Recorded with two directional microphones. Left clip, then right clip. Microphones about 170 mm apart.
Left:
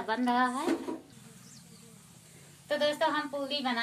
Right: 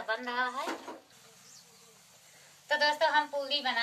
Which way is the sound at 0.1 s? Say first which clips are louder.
Left 4 dB; 40° left (ahead or behind).